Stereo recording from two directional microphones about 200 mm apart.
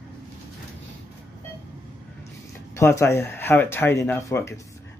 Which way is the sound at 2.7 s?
15° left (ahead or behind).